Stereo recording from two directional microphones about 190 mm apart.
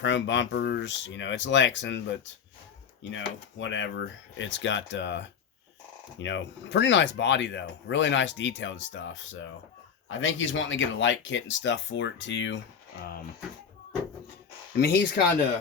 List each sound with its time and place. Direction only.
0.0 s speech: 70° left (ahead or behind)
3.0 s speech: 85° left
6.2 s speech: 70° left (ahead or behind)
14.8 s speech: 55° left (ahead or behind)